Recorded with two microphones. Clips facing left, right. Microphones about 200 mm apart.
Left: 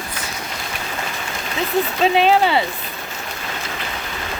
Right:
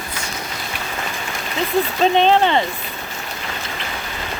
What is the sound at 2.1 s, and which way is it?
Speech, 5° left (ahead or behind).